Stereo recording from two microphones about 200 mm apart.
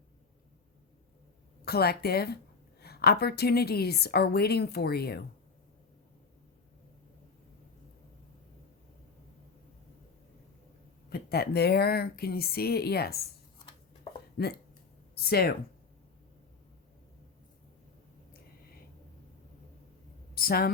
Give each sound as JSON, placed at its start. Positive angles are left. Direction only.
{"t": 1.6, "sound": "a woman's voice", "side_deg": 50}
{"t": 11.1, "sound": "a woman's voice", "side_deg": 50}
{"t": 14.3, "sound": "a woman's voice", "side_deg": 55}
{"t": 20.3, "sound": "a sound", "side_deg": 50}